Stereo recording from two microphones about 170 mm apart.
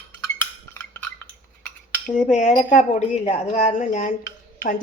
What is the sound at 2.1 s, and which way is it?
Speech, 45° left (ahead or behind).